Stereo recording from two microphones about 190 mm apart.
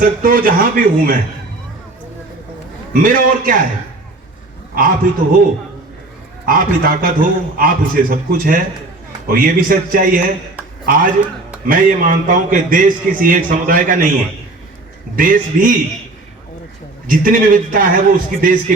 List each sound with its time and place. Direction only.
0.0 s a man's voice: 45° right (ahead or behind)
2.9 s a man's voice: 45° right (ahead or behind)
4.7 s a man's voice: 50° right (ahead or behind)
6.4 s a man's voice: 50° right (ahead or behind)
17.1 s a man's voice: 45° right (ahead or behind)